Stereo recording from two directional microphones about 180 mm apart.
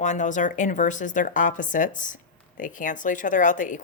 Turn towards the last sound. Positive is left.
turn(degrees=45)  # may be behind; listen again after turning